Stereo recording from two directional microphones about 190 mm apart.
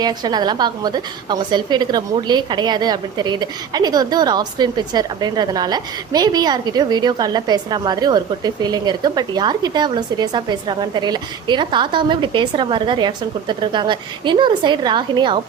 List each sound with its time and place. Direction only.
0.0 s a woman's voice: 20° right (ahead or behind)